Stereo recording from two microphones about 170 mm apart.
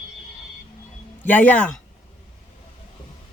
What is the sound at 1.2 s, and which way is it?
Speech, 10° left (ahead or behind).